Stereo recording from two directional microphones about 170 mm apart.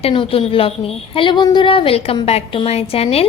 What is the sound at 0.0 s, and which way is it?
A woman's voice, 30° left (ahead or behind).